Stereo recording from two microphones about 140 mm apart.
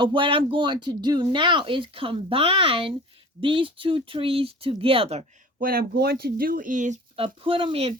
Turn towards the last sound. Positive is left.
turn(degrees=-40)  # may be behind; listen again after turning